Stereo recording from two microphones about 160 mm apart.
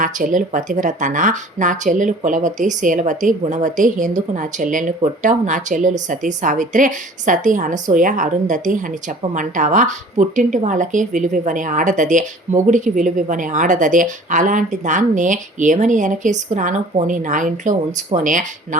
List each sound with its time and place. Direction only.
0.0 s a woman's voice: 55° right (ahead or behind)